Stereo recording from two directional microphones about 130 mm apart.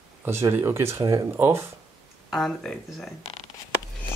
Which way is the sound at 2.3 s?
Centre (ahead or behind).